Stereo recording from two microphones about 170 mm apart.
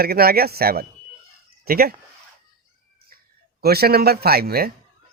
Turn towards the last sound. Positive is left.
turn(degrees=-65)  # may be behind; listen again after turning